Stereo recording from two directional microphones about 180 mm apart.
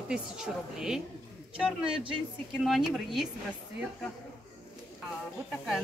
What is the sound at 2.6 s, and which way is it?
Speech, centre (ahead or behind).